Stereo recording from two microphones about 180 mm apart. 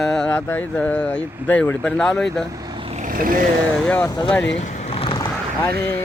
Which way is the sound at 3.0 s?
50° right (ahead or behind).